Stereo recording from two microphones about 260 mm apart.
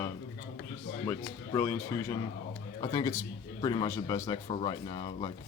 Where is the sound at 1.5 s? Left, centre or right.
Centre.